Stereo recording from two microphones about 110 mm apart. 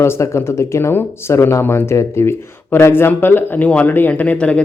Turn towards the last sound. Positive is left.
turn(degrees=10)  # may be behind; listen again after turning